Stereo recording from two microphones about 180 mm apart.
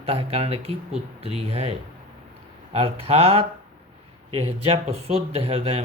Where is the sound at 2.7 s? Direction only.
35° right (ahead or behind).